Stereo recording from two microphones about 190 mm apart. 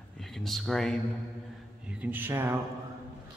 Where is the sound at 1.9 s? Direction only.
10° right (ahead or behind).